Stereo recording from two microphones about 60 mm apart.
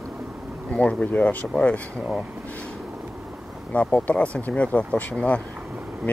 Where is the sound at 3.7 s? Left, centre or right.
Left.